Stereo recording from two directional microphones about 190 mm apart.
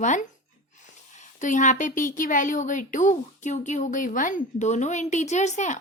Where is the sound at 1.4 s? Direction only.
40° left (ahead or behind).